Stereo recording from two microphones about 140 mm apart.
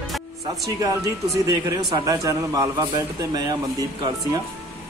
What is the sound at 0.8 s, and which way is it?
Speech, 25° right (ahead or behind).